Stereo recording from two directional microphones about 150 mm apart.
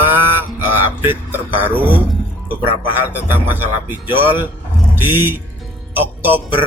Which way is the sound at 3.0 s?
15° right (ahead or behind).